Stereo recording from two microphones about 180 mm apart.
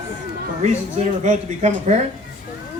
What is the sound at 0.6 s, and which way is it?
Speech, 40° right (ahead or behind).